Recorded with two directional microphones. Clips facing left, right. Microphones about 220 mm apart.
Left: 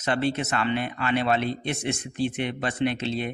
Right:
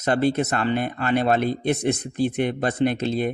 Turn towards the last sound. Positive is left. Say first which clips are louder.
# right 4 dB
turn(degrees=-45)  # may be behind; listen again after turning